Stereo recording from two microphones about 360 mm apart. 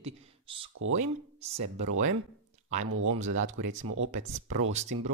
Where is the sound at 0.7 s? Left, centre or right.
Right.